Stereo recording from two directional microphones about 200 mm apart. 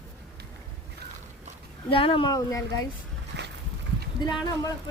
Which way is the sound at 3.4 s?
60° right (ahead or behind).